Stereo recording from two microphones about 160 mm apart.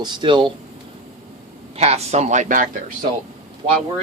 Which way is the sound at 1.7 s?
40° right (ahead or behind).